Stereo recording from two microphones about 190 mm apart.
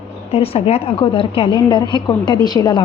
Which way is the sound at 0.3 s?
30° left (ahead or behind).